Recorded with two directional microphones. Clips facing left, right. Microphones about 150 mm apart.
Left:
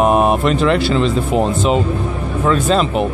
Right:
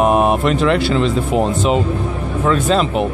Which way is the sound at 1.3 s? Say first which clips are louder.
Even; 10° right (ahead or behind).